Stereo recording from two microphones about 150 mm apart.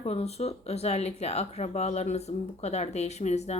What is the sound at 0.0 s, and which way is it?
Speech, 45° left (ahead or behind).